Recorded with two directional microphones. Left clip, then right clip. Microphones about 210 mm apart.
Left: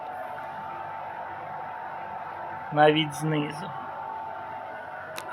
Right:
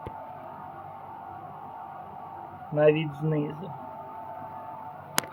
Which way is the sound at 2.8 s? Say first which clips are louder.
Left 2 dB; 5° right (ahead or behind).